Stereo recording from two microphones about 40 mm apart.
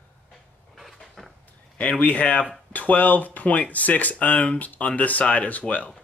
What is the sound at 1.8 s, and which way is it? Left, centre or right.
Speech, left.